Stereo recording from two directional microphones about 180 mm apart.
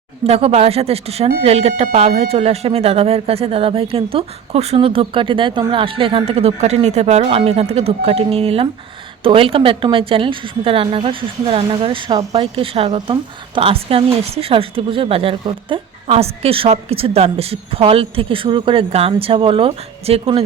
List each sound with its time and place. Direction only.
0.3 s a woman's voice: 35° right (ahead or behind)